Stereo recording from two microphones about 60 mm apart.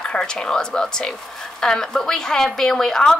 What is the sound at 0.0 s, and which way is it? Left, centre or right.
A woman's voice, centre.